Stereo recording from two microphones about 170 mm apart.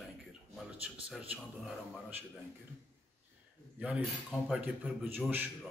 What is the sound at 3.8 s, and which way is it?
Speech, 10° right (ahead or behind).